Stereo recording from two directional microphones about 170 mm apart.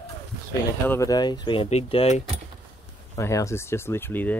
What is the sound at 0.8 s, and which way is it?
Speech, 20° left (ahead or behind).